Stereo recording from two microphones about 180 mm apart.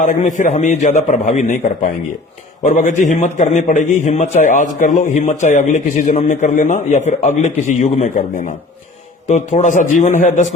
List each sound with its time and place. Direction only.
0.0 s a man's voice: 45° left (ahead or behind)
2.6 s a man's voice: 45° left (ahead or behind)